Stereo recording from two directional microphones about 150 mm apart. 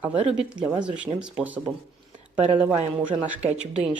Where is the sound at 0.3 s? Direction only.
5° right (ahead or behind).